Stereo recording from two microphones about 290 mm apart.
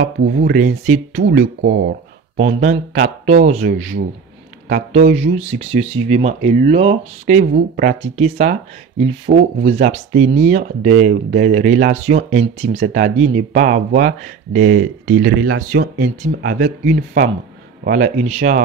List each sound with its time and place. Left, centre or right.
0.0 s speech: right
15.0 s speech: right
15.7 s speech: right